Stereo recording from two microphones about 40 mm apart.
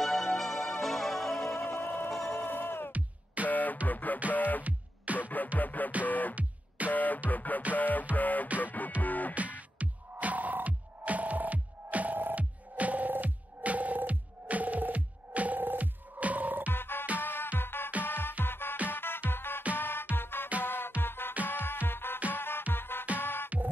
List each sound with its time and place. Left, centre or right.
0.0 s music: centre
1.8 s a sound: left
2.0 s music: centre
2.3 s a sound: left
3.4 s music: left
4.6 s music: right
5.6 s music: left
9.3 s music: right
16.7 s music: left